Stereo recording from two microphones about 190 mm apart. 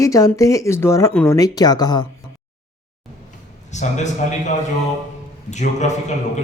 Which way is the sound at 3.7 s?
40° left (ahead or behind).